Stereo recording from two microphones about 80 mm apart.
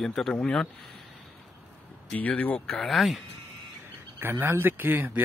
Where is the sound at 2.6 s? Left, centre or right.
Centre.